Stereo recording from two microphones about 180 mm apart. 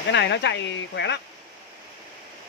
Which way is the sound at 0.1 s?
80° left.